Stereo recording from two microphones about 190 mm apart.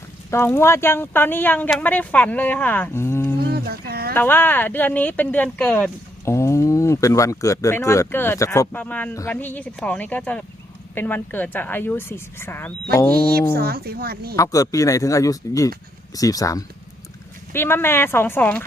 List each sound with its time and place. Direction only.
0.3 s speech: 15° left (ahead or behind)
3.4 s humming: 55° right (ahead or behind)
4.1 s speech: 10° left (ahead or behind)
13.5 s speech: 55° right (ahead or behind)
14.3 s speech: 15° left (ahead or behind)